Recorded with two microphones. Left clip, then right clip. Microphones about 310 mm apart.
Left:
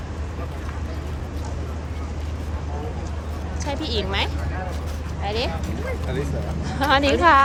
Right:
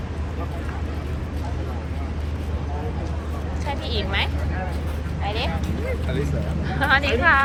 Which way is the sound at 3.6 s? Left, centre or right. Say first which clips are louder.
Left 2 dB; centre.